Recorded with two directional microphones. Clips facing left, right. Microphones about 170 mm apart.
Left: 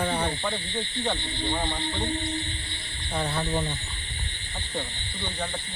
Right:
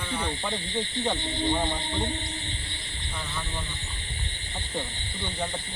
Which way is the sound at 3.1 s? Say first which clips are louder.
Left 8 dB; 65° left (ahead or behind).